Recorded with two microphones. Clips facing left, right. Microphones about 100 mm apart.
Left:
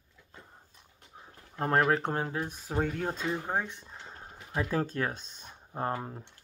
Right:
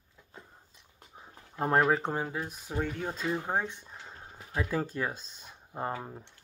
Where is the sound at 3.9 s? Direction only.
Centre (ahead or behind).